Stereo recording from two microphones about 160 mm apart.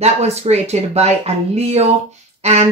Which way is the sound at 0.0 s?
40° right (ahead or behind).